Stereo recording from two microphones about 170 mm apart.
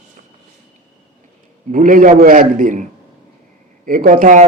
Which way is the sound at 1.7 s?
50° right (ahead or behind).